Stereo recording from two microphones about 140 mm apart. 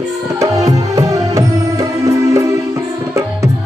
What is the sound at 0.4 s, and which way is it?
Music, 25° right (ahead or behind).